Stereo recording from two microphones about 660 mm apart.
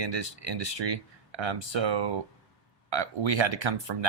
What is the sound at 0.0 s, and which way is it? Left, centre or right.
Speech, right.